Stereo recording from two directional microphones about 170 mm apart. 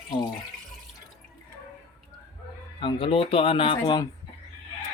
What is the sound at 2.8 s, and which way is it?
Speech, 30° left (ahead or behind).